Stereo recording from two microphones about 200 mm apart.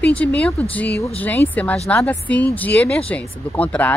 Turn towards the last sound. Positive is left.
turn(degrees=10)  # may be behind; listen again after turning